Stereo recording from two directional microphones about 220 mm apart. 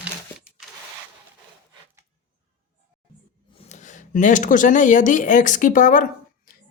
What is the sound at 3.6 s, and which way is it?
Speech, 35° left (ahead or behind).